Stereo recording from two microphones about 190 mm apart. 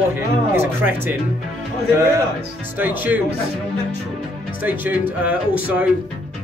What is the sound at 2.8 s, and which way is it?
Speech, 10° right (ahead or behind).